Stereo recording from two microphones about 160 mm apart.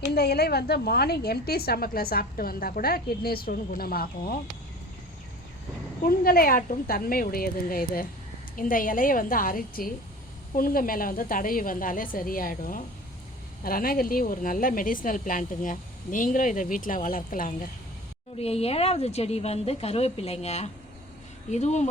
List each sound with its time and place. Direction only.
0.1 s a woman's voice: 90° left; by 4.4 s 70° left (ahead or behind)
6.1 s a woman's voice: 70° left (ahead or behind)
18.3 s a woman's voice: 40° left (ahead or behind)